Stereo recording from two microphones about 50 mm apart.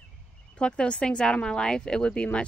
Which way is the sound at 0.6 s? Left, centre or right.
Left.